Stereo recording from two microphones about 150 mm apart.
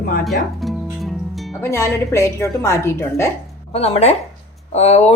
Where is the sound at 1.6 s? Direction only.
20° left (ahead or behind).